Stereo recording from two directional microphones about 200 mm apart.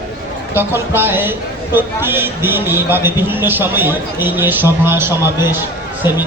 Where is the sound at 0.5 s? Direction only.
10° right (ahead or behind).